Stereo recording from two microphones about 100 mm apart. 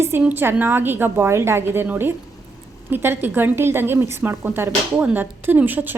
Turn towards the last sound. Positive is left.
turn(degrees=-20)  # may be behind; listen again after turning